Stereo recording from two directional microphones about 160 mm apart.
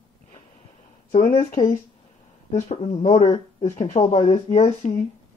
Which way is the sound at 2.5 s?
45° left (ahead or behind).